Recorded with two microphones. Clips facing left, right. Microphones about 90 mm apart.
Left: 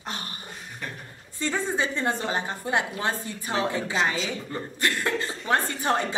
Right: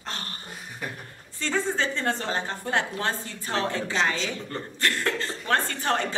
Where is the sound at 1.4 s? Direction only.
15° left (ahead or behind).